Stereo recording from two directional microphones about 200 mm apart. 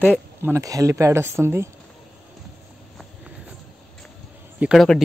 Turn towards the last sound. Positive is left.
turn(degrees=0)  # may be behind; listen again after turning